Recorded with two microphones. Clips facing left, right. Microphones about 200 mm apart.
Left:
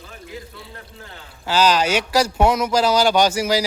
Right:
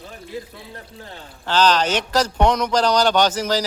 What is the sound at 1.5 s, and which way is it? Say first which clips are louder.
A man's voice: even; 10° left (ahead or behind).